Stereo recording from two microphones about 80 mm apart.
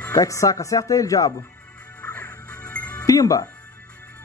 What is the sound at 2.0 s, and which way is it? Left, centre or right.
Music, centre.